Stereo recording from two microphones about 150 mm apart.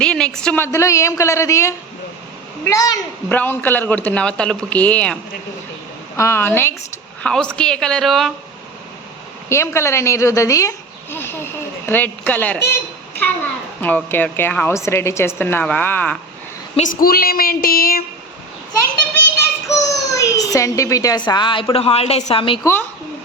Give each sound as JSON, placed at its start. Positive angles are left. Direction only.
{"t": 0.0, "sound": "a sound", "side_deg": 5}
{"t": 0.6, "sound": "a child's voice", "side_deg": 20}
{"t": 3.2, "sound": "a man's voice", "side_deg": 10}
{"t": 6.1, "sound": "a man's voice", "side_deg": 15}
{"t": 9.5, "sound": "a child's voice", "side_deg": 20}
{"t": 13.8, "sound": "a man's voice", "side_deg": 10}
{"t": 16.7, "sound": "a woman's voice", "side_deg": 60}
{"t": 19.6, "sound": "a child's voice", "side_deg": 20}
{"t": 22.6, "sound": "a man's voice", "side_deg": 15}